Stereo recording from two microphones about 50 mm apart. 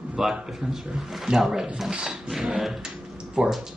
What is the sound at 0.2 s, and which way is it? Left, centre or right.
Speech, centre.